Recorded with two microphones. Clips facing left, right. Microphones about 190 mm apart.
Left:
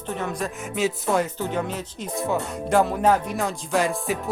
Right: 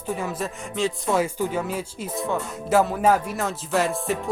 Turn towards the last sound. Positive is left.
turn(degrees=0)  # may be behind; listen again after turning